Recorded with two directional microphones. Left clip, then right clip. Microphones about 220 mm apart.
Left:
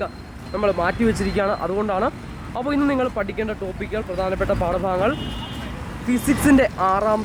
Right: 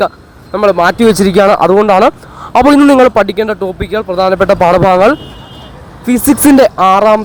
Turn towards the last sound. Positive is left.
turn(degrees=-35)  # may be behind; listen again after turning